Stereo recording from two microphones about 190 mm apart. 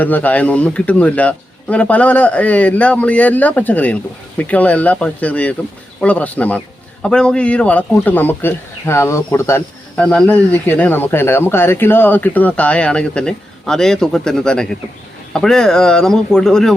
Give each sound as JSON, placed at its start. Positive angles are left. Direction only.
{"t": 0.0, "sound": "speech", "side_deg": 10}